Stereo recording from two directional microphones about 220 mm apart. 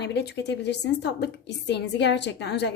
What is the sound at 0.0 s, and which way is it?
A woman's voice, 50° left (ahead or behind).